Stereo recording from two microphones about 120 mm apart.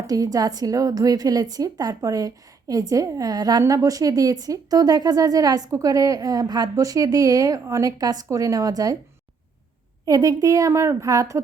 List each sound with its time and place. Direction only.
0.1 s a woman's voice: 30° right (ahead or behind)
10.1 s a woman's voice: 30° right (ahead or behind)